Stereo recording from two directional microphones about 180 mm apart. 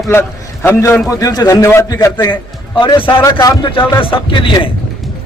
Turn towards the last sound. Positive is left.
turn(degrees=25)  # may be behind; listen again after turning